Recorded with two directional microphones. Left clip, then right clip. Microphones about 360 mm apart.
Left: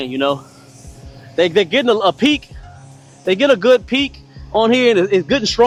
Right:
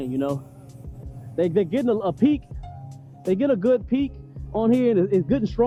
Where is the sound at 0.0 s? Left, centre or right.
Centre.